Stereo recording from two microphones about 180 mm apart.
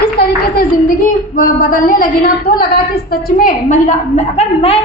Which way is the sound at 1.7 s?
50° left (ahead or behind).